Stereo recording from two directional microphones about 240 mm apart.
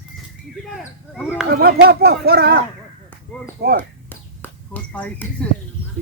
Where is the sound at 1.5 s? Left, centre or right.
Right.